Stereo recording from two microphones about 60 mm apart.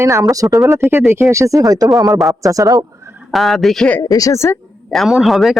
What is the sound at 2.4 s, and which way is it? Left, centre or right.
Speech, right.